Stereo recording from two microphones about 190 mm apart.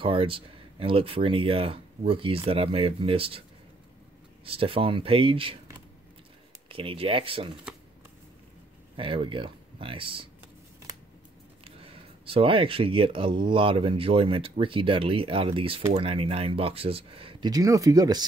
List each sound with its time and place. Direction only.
0.0 s speech: 30° right (ahead or behind)
4.5 s speech: 30° right (ahead or behind)
6.7 s speech: 30° right (ahead or behind)
8.9 s speech: 30° right (ahead or behind)
11.6 s speech: 30° right (ahead or behind)